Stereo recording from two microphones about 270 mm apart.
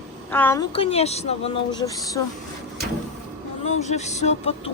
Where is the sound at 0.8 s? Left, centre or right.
Left.